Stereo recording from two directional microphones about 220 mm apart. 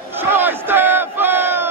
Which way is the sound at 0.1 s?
10° right (ahead or behind).